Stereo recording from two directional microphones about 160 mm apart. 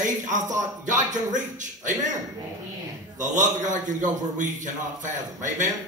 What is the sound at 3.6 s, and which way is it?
A man's voice, 50° right (ahead or behind).